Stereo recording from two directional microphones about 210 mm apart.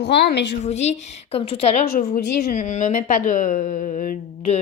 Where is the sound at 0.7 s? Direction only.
30° left (ahead or behind).